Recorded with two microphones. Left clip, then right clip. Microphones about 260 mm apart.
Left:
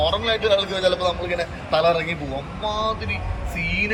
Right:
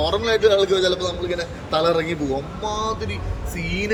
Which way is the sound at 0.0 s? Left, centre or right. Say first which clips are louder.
Right 3 dB; centre.